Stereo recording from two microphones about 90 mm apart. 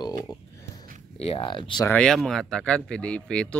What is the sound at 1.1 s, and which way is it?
Speech, 90° left.